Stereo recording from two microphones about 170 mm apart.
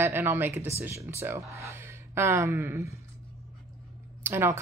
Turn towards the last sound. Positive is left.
turn(degrees=-15)  # may be behind; listen again after turning